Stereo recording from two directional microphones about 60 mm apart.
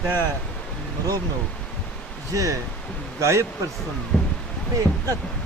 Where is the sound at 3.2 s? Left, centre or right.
Right.